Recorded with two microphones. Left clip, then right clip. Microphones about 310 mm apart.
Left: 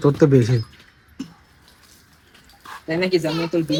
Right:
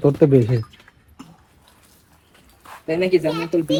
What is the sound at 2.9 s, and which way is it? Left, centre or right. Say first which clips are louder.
Speech: right 2 dB; centre.